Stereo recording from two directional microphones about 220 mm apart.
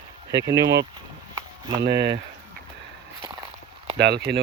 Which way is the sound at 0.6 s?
50° right (ahead or behind).